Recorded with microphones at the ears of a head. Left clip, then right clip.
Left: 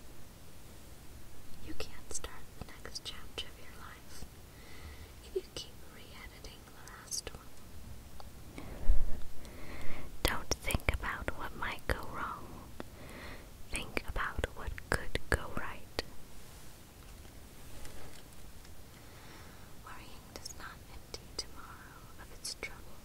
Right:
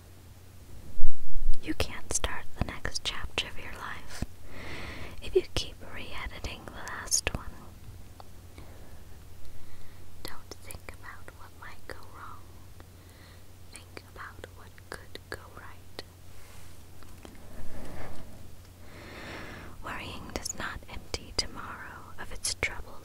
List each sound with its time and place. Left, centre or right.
1.6 s whispering: right
9.7 s whispering: left
17.7 s a sound: right
18.9 s whispering: right